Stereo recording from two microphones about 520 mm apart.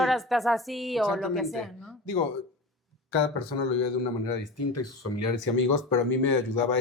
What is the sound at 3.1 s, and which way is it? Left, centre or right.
Speech, left.